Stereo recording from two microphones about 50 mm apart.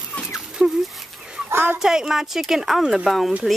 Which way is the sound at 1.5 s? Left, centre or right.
Right.